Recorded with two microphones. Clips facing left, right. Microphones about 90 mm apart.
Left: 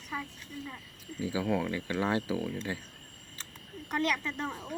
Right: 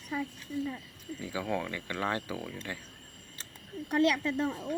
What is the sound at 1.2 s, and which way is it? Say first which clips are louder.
Speech: left 3 dB; 10° left (ahead or behind).